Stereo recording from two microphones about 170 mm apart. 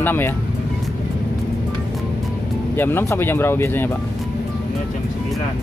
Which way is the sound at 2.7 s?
15° left (ahead or behind).